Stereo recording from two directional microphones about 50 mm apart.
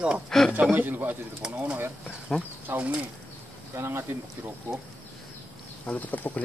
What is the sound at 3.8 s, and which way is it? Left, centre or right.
Speech, right.